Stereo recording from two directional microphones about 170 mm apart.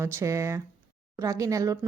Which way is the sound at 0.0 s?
15° right (ahead or behind).